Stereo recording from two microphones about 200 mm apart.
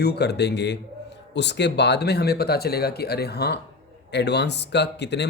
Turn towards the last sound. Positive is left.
turn(degrees=60)  # may be behind; listen again after turning